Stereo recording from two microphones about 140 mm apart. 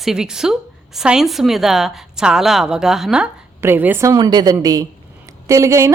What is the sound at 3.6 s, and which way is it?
A woman's voice, 15° right (ahead or behind).